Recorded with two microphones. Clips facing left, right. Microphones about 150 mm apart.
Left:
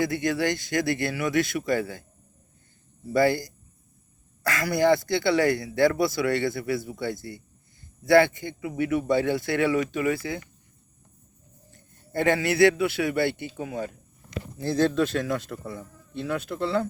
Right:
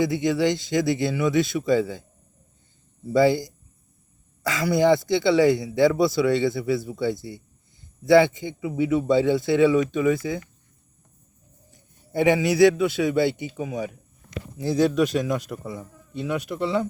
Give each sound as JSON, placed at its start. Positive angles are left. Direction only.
{"t": 0.0, "sound": "speech", "side_deg": -20}
{"t": 3.1, "sound": "speech", "side_deg": -20}
{"t": 11.7, "sound": "a man's voice", "side_deg": -15}